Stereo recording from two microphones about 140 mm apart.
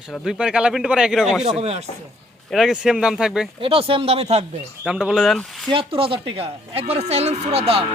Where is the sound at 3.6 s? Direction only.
40° right (ahead or behind).